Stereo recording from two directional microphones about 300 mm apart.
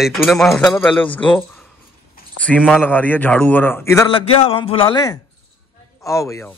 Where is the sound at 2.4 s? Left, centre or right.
Centre.